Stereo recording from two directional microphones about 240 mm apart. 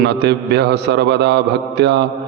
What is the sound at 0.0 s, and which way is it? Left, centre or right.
A man's voice, right.